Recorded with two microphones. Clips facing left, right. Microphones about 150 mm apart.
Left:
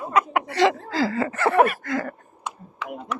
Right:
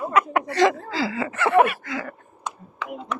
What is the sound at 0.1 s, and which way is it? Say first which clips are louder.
Chuckle: left 1 dB; 20° left (ahead or behind).